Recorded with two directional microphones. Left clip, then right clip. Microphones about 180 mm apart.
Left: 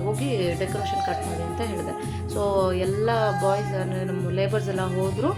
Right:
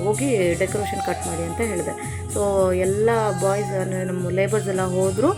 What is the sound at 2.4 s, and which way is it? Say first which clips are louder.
A woman's voice: right 4 dB; 15° right (ahead or behind).